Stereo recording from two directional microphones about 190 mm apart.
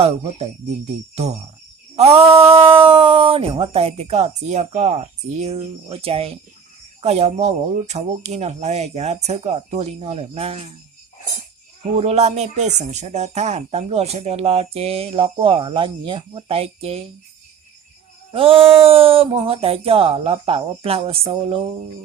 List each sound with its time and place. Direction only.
1.1 s speech: 35° right (ahead or behind)
11.8 s speech: 35° right (ahead or behind)
18.3 s speech: 30° right (ahead or behind)